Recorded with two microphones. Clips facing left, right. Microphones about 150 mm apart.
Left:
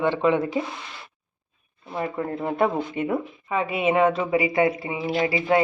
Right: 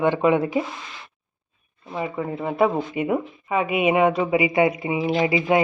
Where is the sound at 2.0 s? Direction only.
5° right (ahead or behind).